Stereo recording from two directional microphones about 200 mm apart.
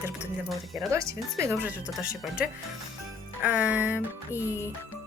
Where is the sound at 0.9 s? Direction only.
15° right (ahead or behind).